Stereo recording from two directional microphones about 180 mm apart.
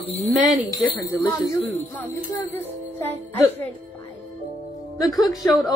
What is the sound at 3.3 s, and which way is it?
Speech, 35° right (ahead or behind).